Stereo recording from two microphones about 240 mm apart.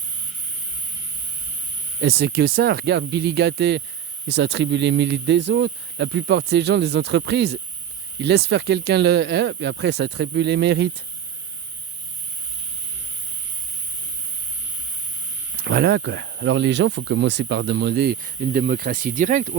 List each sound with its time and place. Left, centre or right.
2.0 s speech: right
15.5 s speech: right